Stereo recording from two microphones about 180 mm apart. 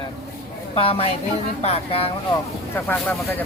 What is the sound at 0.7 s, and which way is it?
Speech, 30° left (ahead or behind).